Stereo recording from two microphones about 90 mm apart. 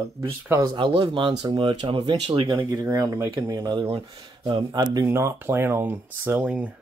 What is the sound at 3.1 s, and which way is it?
Speech, 35° right (ahead or behind).